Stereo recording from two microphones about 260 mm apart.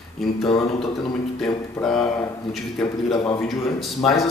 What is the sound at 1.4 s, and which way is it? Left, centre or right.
Speech, centre.